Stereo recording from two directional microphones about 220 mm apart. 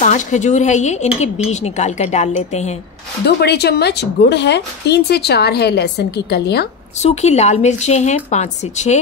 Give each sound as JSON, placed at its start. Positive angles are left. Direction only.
{"t": 0.0, "sound": "speech", "side_deg": 30}
{"t": 3.3, "sound": "speech", "side_deg": 45}
{"t": 7.0, "sound": "speech", "side_deg": 30}